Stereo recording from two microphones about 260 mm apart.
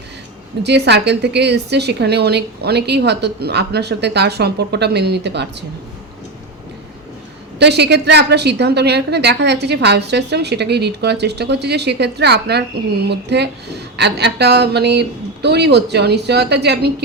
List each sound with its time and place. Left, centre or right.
0.6 s a woman's voice: right
7.6 s a woman's voice: right